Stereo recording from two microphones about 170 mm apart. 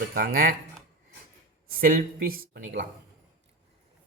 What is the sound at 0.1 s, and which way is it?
Speech, 55° right (ahead or behind).